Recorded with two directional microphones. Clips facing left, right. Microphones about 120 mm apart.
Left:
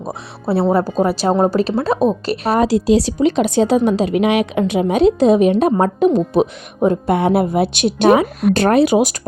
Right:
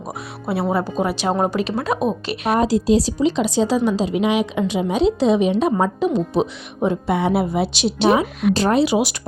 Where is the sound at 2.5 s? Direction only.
75° left (ahead or behind).